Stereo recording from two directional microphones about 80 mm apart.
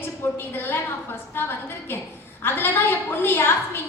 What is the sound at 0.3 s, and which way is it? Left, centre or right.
A woman's voice, left.